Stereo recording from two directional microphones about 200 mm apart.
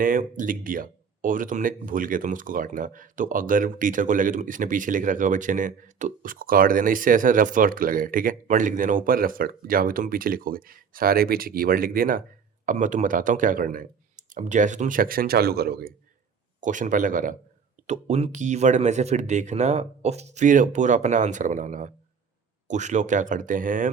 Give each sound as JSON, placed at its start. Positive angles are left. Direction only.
{"t": 0.0, "sound": "speech", "side_deg": -40}
{"t": 16.6, "sound": "speech", "side_deg": -40}